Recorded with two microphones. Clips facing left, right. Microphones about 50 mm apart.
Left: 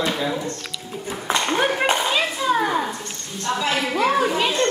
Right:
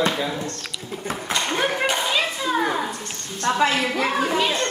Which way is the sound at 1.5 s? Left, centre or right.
Centre.